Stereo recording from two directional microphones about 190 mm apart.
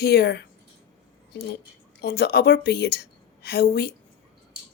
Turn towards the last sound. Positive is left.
turn(degrees=55)  # may be behind; listen again after turning